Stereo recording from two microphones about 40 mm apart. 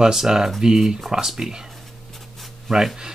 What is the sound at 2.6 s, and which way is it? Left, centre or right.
Speech, centre.